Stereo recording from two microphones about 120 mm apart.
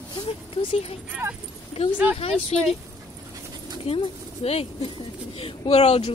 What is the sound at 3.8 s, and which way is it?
Speech, 50° left (ahead or behind).